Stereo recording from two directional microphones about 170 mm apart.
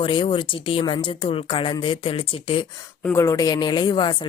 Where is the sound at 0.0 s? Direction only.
30° left (ahead or behind).